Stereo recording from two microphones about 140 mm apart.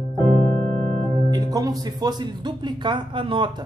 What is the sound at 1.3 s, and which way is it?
Speech, 30° right (ahead or behind).